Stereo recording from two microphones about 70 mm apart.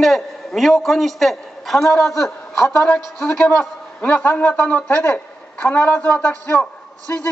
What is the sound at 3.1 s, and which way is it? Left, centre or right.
A man's voice, left.